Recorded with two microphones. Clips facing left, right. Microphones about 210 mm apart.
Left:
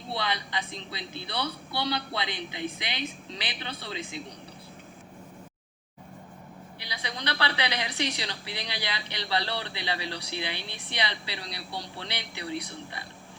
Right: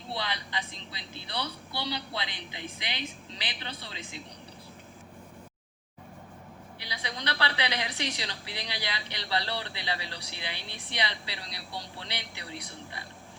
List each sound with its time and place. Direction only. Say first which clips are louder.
0.1 s a woman's voice: left 3 dB; 60° left (ahead or behind)
6.7 s a woman's voice: left 1 dB; 65° left (ahead or behind)